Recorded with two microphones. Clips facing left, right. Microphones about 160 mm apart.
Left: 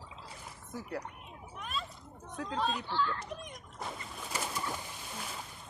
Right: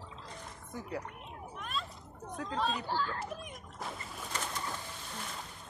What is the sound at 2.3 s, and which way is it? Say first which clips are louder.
Speech: even; centre (ahead or behind).